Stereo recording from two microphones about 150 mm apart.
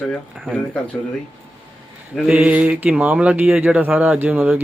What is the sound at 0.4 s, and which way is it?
Speech, 5° left (ahead or behind).